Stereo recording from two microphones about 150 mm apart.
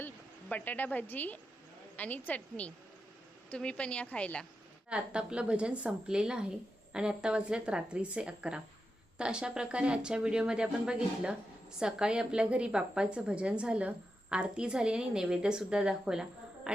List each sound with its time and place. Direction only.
0.0 s a woman's voice: 10° left (ahead or behind)
4.9 s a woman's voice: 5° right (ahead or behind)
16.7 s insect: 5° right (ahead or behind)